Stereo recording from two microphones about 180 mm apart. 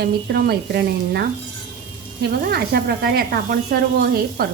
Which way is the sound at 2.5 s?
60° right (ahead or behind).